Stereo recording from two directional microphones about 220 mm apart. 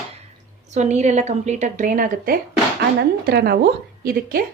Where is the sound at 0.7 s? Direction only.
30° right (ahead or behind).